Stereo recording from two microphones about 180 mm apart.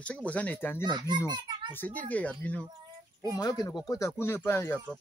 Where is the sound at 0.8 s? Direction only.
25° right (ahead or behind).